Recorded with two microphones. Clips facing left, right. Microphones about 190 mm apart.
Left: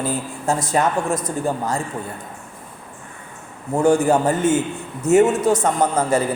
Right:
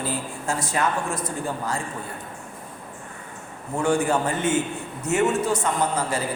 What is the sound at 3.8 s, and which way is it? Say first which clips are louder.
A man's voice: left 6 dB; 40° left (ahead or behind).